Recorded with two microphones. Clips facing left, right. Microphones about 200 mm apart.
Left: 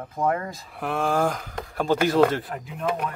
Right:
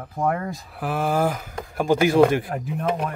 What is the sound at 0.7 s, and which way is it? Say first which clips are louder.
Speech: right 1 dB; 5° right (ahead or behind).